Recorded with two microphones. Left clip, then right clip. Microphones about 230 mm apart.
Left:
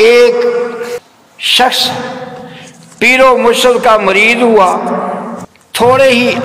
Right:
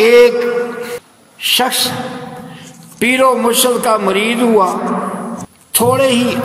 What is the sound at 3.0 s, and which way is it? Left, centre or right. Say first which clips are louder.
A man's voice: left 5 dB; right.